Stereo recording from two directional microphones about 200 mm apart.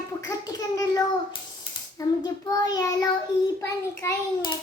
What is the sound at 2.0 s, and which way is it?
Child singing, 20° left (ahead or behind).